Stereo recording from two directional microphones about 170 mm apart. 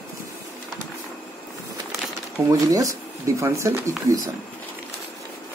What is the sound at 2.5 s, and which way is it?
Speech, 20° right (ahead or behind).